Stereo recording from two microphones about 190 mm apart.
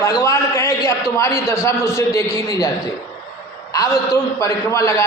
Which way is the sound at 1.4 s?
15° left (ahead or behind).